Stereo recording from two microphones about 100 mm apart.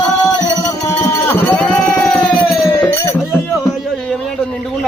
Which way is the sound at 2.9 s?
25° left (ahead or behind).